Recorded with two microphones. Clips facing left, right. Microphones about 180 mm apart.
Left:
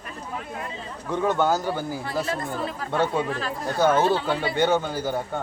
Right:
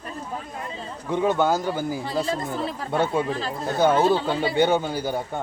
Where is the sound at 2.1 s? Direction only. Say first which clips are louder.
Right 1 dB; 30° right (ahead or behind).